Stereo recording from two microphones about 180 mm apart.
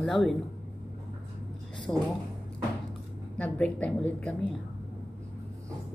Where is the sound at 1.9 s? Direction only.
20° left (ahead or behind).